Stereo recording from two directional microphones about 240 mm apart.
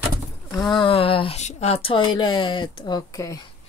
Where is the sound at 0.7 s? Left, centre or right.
Left.